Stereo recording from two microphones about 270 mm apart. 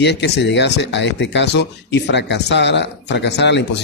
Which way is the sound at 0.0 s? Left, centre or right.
Left.